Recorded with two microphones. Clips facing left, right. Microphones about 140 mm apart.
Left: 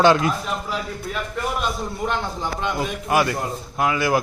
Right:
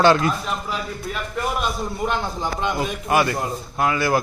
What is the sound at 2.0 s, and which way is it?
Speech, 15° right (ahead or behind).